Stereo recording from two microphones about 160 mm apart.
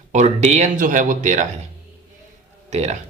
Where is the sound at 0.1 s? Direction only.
45° right (ahead or behind).